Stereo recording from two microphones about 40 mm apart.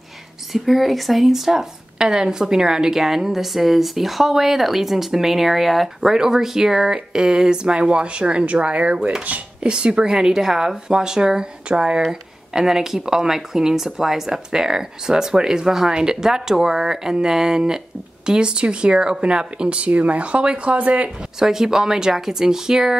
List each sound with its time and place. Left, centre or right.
0.5 s speech: centre
6.1 s speech: centre
12.1 s speech: centre; by 21.1 s right
21.4 s speech: centre